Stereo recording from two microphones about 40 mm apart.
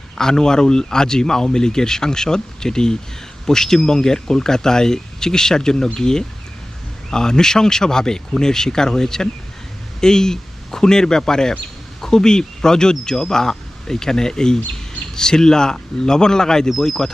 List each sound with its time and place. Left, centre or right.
0.2 s speech: centre